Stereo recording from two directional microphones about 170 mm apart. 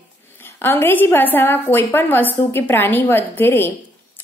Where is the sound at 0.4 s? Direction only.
15° left (ahead or behind).